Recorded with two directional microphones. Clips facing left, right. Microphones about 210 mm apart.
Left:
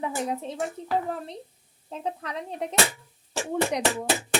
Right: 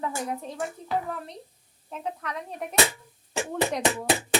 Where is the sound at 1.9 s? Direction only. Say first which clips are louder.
Left 1 dB; 30° left (ahead or behind); by 3.8 s 15° left (ahead or behind).